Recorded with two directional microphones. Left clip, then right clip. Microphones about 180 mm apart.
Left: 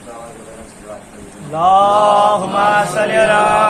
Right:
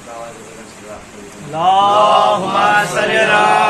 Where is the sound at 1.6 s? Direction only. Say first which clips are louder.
Left 1 dB; 60° left (ahead or behind).